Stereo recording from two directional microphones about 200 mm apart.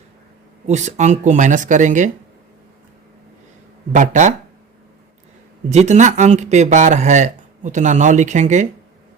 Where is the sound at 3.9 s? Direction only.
40° right (ahead or behind).